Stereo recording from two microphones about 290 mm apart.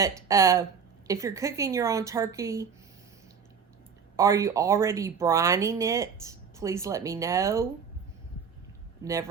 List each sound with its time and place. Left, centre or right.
0.0 s speech: centre
4.2 s speech: centre